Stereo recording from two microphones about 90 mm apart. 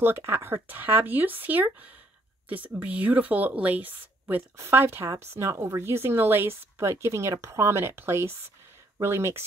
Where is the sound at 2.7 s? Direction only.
15° right (ahead or behind).